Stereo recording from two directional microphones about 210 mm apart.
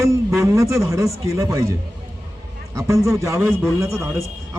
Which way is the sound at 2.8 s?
15° right (ahead or behind).